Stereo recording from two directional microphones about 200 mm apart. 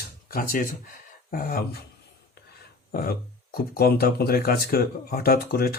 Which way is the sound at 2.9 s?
50° left (ahead or behind).